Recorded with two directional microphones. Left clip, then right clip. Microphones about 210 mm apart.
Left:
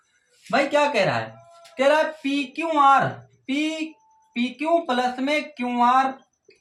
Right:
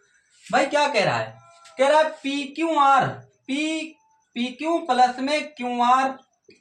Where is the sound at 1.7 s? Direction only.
15° left (ahead or behind).